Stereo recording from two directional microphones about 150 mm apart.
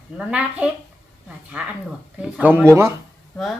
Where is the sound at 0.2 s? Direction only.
10° right (ahead or behind).